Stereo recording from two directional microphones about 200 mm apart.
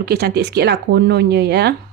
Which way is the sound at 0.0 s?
55° right (ahead or behind).